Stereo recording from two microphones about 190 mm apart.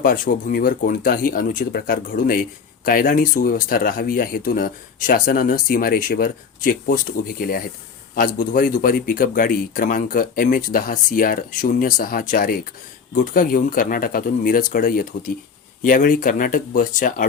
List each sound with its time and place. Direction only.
0.0 s speech: 50° left (ahead or behind)